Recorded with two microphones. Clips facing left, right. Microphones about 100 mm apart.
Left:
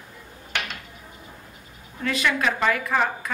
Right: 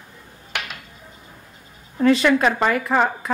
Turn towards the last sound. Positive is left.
turn(degrees=-30)  # may be behind; listen again after turning